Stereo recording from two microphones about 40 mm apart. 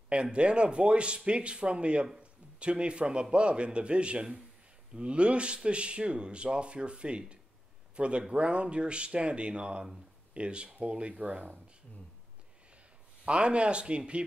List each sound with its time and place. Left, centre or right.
0.1 s speech: right
11.2 s speech: right
13.2 s speech: right